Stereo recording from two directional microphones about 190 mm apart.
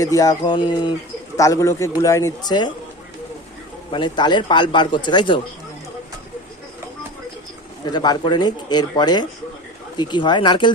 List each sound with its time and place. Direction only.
0.0 s speech: 20° left (ahead or behind)
3.9 s speech: 25° left (ahead or behind)
7.9 s speech: 20° left (ahead or behind)